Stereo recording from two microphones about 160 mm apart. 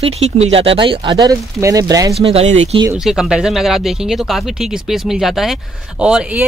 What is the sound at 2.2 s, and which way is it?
Speech, 40° right (ahead or behind).